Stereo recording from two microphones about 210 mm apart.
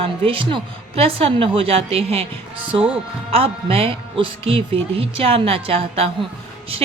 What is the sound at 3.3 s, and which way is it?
A woman's voice, 25° right (ahead or behind).